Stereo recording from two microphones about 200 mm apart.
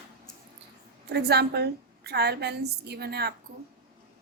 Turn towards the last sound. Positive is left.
turn(degrees=-55)  # may be behind; listen again after turning